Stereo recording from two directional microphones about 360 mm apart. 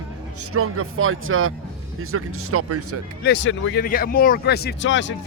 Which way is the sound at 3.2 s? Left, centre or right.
Left.